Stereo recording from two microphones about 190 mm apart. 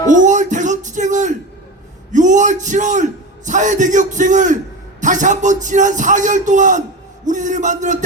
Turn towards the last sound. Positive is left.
turn(degrees=-40)  # may be behind; listen again after turning